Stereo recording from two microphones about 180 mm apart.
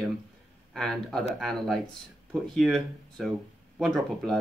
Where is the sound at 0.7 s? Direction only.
5° left (ahead or behind).